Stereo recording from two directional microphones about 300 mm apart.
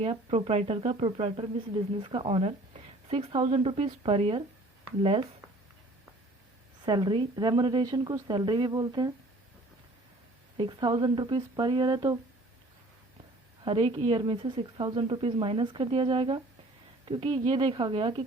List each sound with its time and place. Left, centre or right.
0.0 s speech: centre
6.8 s a woman's voice: centre
10.6 s a woman's voice: centre
13.7 s a woman's voice: centre